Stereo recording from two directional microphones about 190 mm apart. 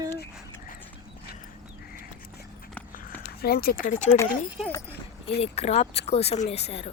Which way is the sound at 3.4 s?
50° left (ahead or behind).